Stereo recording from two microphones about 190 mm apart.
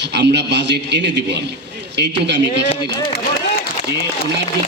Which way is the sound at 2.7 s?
30° left (ahead or behind).